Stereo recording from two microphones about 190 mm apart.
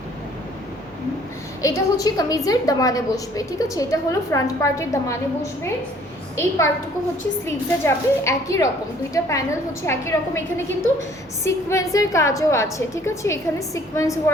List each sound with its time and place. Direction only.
1.6 s a woman's voice: 20° left (ahead or behind)
7.4 s a woman's voice: 15° left (ahead or behind)
11.4 s a woman's voice: 15° left (ahead or behind)